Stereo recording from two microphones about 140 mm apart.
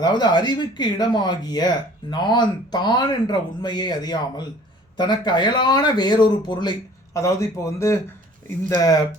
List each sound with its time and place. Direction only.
0.0 s speech: 30° left (ahead or behind)